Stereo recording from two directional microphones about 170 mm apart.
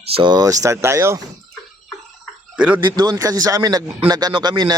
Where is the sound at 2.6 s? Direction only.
10° right (ahead or behind).